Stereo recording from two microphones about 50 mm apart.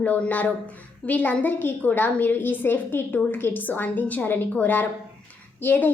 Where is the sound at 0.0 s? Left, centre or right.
Left.